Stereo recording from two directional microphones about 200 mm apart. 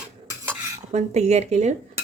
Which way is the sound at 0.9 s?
35° right (ahead or behind).